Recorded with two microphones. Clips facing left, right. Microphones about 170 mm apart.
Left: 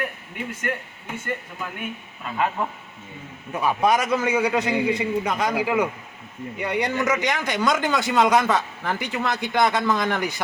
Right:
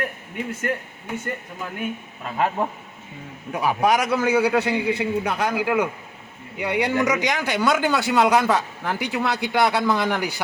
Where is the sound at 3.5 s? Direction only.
10° right (ahead or behind).